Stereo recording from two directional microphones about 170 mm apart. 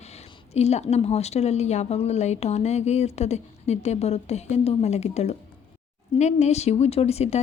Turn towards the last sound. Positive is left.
turn(degrees=40)  # may be behind; listen again after turning